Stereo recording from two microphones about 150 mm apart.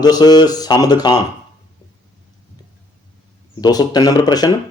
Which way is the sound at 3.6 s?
25° left (ahead or behind).